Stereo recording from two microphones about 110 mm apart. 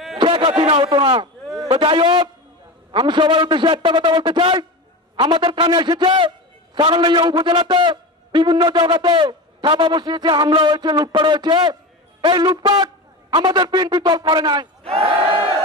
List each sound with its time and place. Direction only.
0.2 s a man's voice: 50° right (ahead or behind)
14.9 s battle cry: 60° right (ahead or behind)